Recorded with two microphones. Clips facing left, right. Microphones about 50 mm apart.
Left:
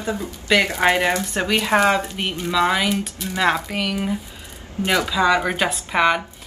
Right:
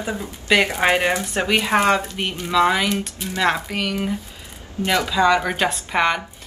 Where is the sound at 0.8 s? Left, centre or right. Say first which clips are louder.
Even; centre.